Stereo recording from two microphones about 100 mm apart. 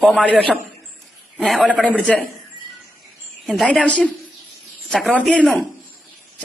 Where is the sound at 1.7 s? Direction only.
10° left (ahead or behind).